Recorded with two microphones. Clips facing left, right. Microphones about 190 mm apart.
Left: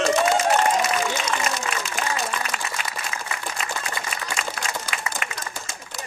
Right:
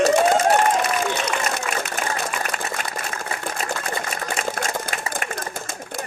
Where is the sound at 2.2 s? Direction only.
50° right (ahead or behind).